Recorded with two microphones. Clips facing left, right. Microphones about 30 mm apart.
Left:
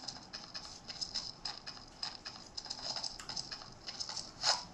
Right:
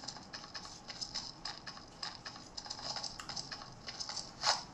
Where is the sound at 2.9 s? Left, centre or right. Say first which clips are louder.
Even; centre.